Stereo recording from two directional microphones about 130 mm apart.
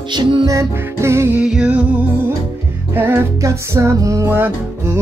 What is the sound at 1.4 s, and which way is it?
Music, 10° right (ahead or behind).